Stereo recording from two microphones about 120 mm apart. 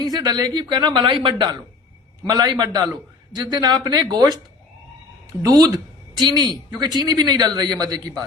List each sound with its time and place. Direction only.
0.0 s speech: 35° right (ahead or behind)
5.4 s speech: 30° right (ahead or behind)